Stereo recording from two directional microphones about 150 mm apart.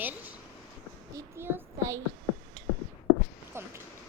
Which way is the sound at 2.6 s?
30° right (ahead or behind).